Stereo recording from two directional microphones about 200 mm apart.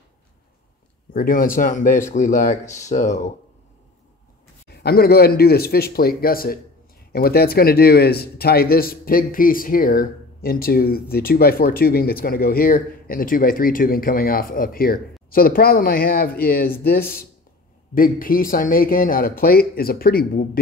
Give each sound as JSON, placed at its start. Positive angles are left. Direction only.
{"t": 1.1, "sound": "speech", "side_deg": 45}
{"t": 4.6, "sound": "speech", "side_deg": 50}